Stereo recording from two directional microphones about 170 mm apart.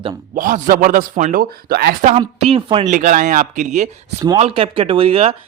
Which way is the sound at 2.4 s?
35° right (ahead or behind).